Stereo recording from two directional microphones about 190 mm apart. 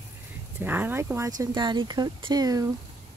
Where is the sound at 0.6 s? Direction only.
10° right (ahead or behind).